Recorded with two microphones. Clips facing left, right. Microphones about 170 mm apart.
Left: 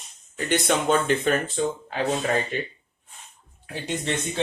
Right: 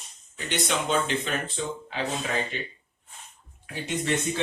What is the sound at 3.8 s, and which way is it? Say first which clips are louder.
Speech: right 1 dB; 30° left (ahead or behind).